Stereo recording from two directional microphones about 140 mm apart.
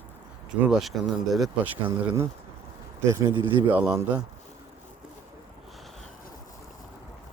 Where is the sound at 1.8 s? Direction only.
15° right (ahead or behind).